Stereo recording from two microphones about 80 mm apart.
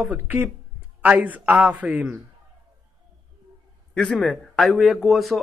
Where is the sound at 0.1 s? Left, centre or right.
Right.